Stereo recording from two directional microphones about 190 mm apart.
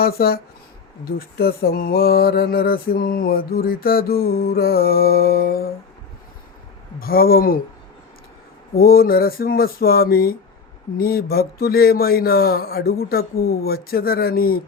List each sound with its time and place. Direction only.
0.0 s mantra: 55° left (ahead or behind)
7.0 s mantra: 50° left (ahead or behind)
8.7 s mantra: 50° left (ahead or behind)